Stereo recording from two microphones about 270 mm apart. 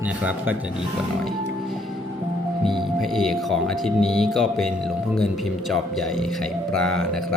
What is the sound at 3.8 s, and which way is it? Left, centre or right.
Speech, centre.